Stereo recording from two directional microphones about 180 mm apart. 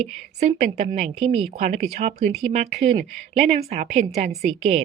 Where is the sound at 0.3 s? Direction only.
40° right (ahead or behind).